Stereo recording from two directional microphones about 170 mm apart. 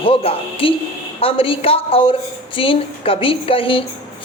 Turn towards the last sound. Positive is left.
turn(degrees=30)  # may be behind; listen again after turning